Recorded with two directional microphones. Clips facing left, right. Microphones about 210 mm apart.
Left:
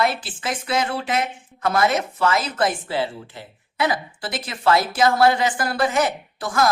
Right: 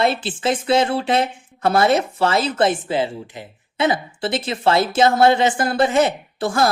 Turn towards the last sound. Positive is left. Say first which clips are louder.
# right 2 dB
turn(degrees=-30)  # may be behind; listen again after turning